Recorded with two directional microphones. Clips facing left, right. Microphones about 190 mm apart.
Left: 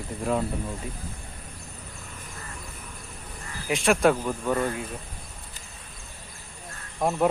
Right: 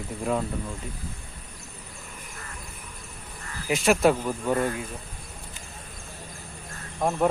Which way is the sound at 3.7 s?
5° right (ahead or behind).